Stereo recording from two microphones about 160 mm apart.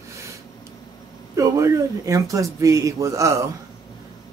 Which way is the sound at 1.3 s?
20° right (ahead or behind).